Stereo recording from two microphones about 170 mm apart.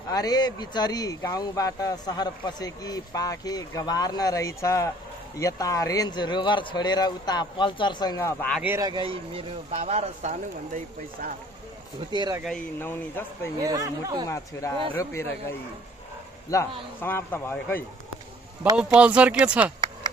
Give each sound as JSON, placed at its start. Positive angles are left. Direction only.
{"t": 0.1, "sound": "speech", "side_deg": 25}
{"t": 8.6, "sound": "speech", "side_deg": -15}
{"t": 8.9, "sound": "speech", "side_deg": -30}
{"t": 12.1, "sound": "speech", "side_deg": -25}
{"t": 12.4, "sound": "speech", "side_deg": 10}
{"t": 13.6, "sound": "speech", "side_deg": -20}
{"t": 14.3, "sound": "speech", "side_deg": 15}
{"t": 16.5, "sound": "speech", "side_deg": 20}
{"t": 18.6, "sound": "speech", "side_deg": -5}